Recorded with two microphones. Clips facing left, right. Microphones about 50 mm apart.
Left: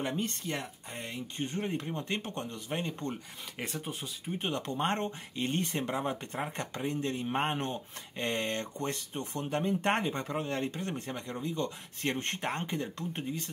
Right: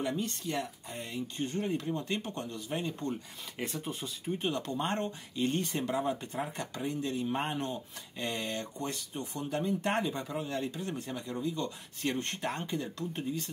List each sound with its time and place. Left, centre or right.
0.0 s speech: left
4.4 s speech: left